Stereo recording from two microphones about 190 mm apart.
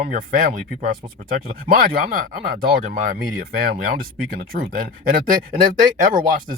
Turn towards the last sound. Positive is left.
turn(degrees=-45)  # may be behind; listen again after turning